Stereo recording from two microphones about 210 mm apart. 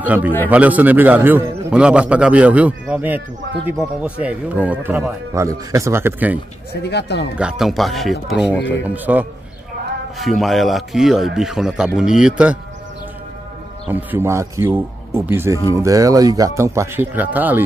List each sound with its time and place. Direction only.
0.0 s a man's voice: 5° right (ahead or behind)
6.7 s speech: 50° left (ahead or behind)
7.3 s a man's voice: 5° right (ahead or behind)
13.8 s a man's voice: 10° right (ahead or behind)